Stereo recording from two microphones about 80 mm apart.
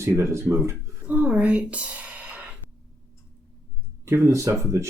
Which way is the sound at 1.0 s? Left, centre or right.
Centre.